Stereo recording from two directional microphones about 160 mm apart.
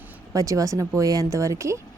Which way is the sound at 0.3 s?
20° right (ahead or behind).